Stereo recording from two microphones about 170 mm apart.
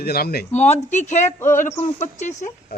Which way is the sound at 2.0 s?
45° left (ahead or behind).